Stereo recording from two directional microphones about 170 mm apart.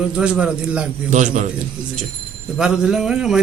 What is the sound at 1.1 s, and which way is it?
Speech, 45° right (ahead or behind).